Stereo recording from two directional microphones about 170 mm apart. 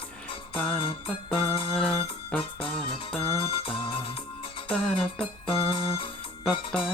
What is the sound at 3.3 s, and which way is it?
Music, 30° left (ahead or behind).